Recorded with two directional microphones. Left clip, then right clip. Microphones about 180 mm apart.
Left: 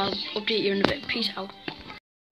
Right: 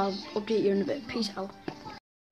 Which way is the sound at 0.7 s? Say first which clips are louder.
Left 5 dB; centre (ahead or behind).